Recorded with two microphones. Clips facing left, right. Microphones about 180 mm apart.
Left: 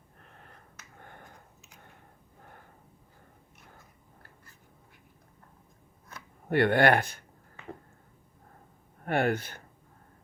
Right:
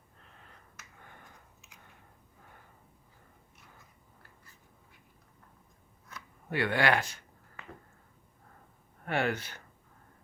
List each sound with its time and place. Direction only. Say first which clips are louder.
0.2 s finger snapping: left 4 dB; 55° left (ahead or behind)
6.5 s speech: left 6 dB; 55° left (ahead or behind)
9.0 s speech: left 4 dB; 50° left (ahead or behind)